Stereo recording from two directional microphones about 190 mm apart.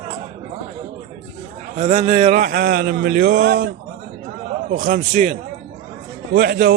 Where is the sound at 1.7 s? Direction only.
35° right (ahead or behind).